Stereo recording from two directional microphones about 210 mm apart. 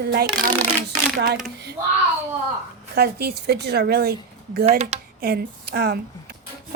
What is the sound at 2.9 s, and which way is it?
Speech, 50° right (ahead or behind).